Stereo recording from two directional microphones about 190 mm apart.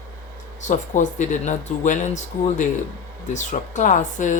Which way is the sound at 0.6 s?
40° left (ahead or behind).